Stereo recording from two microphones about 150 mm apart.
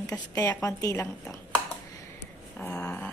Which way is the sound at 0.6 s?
20° left (ahead or behind).